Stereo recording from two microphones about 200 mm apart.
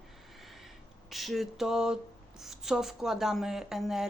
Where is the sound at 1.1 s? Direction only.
Centre (ahead or behind).